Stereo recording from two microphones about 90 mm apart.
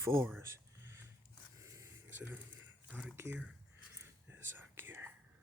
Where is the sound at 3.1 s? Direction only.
25° right (ahead or behind).